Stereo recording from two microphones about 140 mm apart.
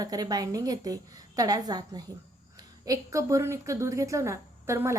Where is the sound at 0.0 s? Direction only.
25° right (ahead or behind).